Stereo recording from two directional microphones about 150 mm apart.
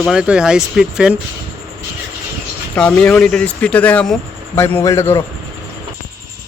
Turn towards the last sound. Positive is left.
turn(degrees=20)  # may be behind; listen again after turning